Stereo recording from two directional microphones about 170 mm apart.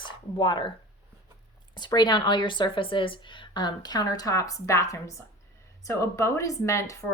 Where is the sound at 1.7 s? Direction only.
25° left (ahead or behind).